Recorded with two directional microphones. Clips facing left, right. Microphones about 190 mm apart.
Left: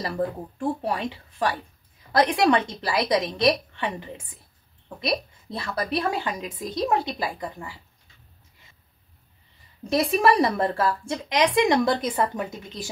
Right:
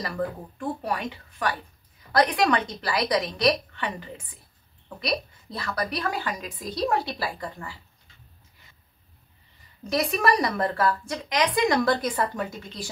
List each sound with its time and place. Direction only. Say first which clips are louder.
0.6 s a woman's voice: left 3 dB; 30° left (ahead or behind)
9.8 s a woman's voice: left 3 dB; 30° left (ahead or behind)